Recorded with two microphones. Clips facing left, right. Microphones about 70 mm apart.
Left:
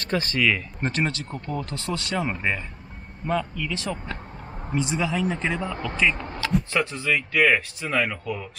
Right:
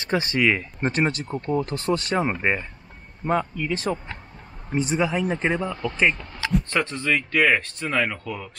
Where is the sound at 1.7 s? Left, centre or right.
Right.